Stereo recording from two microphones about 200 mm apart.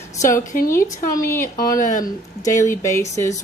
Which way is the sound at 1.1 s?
10° left (ahead or behind).